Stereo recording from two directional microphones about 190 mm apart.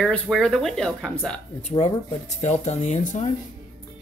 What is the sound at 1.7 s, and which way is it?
Speech, 30° left (ahead or behind).